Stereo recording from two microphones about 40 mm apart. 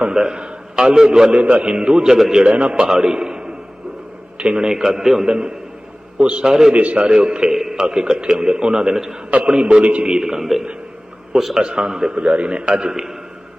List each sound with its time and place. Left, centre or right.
0.1 s a man's voice: centre
1.4 s a man's voice: right
6.7 s a man's voice: right
7.5 s a man's voice: centre
11.6 s a man's voice: right
12.2 s a man's voice: right; by 13.1 s centre